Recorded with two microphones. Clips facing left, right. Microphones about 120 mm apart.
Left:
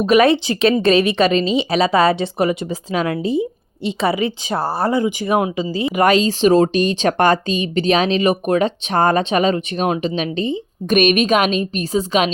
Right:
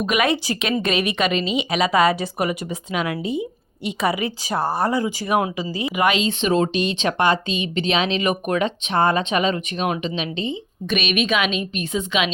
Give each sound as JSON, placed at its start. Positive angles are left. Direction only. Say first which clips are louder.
{"t": 0.0, "sound": "speech", "louder": "left 7 dB", "side_deg": 30}